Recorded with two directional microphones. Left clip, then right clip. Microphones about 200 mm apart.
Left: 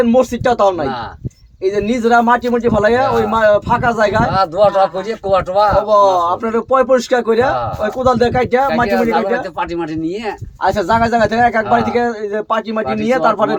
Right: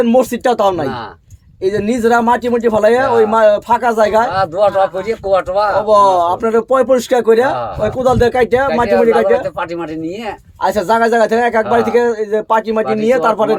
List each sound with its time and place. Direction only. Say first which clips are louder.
0.0 s speech: right 1 dB; 55° right (ahead or behind)
4.3 s speech: left 1 dB; 10° right (ahead or behind)
5.9 s speech: right 1 dB; 55° right (ahead or behind)
8.9 s speech: right 4 dB; 10° right (ahead or behind)
10.6 s a man's voice: right 1 dB; 55° right (ahead or behind)